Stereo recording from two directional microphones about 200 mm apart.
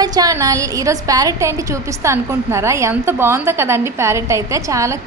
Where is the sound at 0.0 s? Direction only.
20° right (ahead or behind).